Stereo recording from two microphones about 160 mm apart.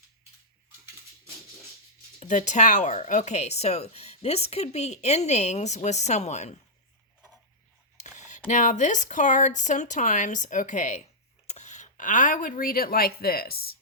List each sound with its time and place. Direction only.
2.1 s speech: 50° left (ahead or behind)
7.9 s a sound: 50° left (ahead or behind)
8.4 s speech: 50° left (ahead or behind); by 13.7 s 70° left (ahead or behind)